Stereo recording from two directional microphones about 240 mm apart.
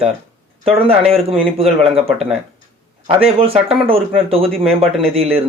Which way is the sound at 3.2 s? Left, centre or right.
Right.